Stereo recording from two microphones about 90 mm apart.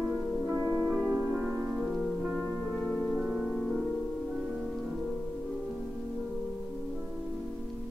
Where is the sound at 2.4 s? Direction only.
15° left (ahead or behind).